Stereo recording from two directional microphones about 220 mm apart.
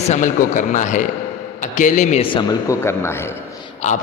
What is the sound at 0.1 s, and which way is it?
A man's voice, 35° left (ahead or behind).